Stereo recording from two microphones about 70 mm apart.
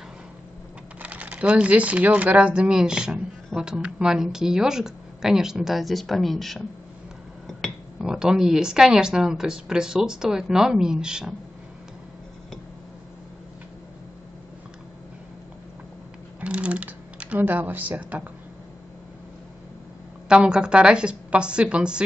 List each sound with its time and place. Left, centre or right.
1.0 s speech: centre
8.0 s speech: centre
16.3 s typing: centre
20.2 s speech: centre